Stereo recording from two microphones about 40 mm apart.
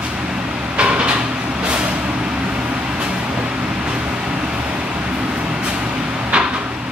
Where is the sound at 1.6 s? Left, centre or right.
Right.